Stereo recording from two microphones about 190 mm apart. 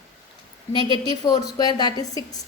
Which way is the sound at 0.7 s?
25° left (ahead or behind).